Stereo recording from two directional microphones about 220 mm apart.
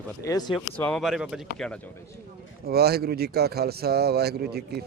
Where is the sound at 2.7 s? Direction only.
45° right (ahead or behind).